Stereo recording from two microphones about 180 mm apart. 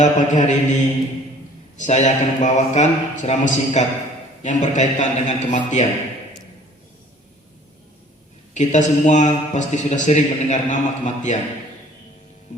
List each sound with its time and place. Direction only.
0.0 s speech: 40° left (ahead or behind)
1.8 s speech: 40° left (ahead or behind)
8.5 s speech: 40° left (ahead or behind)